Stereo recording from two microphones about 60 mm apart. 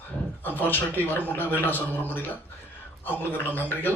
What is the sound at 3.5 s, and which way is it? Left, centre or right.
Speech, left.